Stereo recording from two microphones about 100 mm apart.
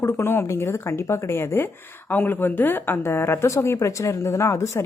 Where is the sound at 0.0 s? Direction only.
25° left (ahead or behind).